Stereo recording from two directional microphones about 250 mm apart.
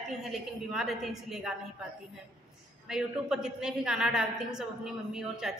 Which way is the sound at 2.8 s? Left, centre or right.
Centre.